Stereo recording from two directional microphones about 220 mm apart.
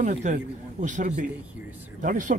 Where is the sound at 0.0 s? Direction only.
30° right (ahead or behind).